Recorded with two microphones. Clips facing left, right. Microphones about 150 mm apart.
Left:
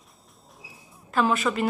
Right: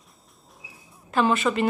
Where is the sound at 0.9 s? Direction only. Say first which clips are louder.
Right 1 dB; centre (ahead or behind).